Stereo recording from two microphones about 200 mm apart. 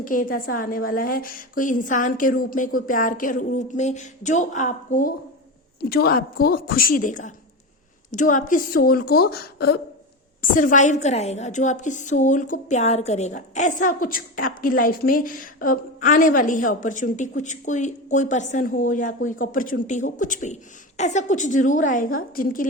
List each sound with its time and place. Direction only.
0.0 s a woman's voice: 45° left (ahead or behind)